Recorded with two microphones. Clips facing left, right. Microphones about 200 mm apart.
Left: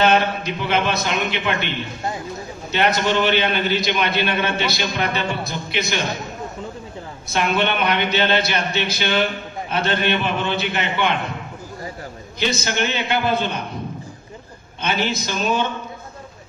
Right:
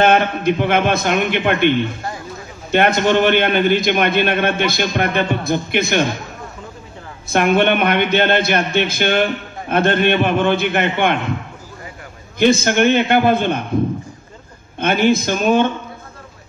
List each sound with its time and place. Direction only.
0.0 s a man's voice: 55° right (ahead or behind)
2.7 s a man's voice: 50° right (ahead or behind)
7.2 s a man's voice: 50° right (ahead or behind)
12.4 s a man's voice: 50° right (ahead or behind)
14.8 s a man's voice: 50° right (ahead or behind)